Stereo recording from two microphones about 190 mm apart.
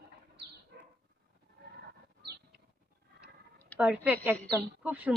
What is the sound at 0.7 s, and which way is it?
Bird, 60° right (ahead or behind).